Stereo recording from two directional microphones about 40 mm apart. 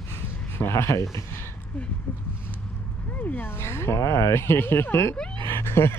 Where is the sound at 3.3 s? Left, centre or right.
Left.